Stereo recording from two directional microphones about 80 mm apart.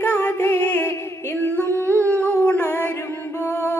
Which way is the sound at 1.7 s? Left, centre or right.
Right.